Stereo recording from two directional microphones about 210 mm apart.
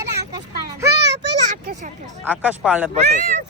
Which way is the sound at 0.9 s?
55° right (ahead or behind).